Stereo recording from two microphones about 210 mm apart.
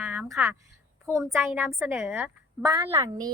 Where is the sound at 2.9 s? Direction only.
20° right (ahead or behind).